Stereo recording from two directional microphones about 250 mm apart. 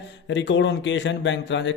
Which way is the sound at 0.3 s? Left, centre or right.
Left.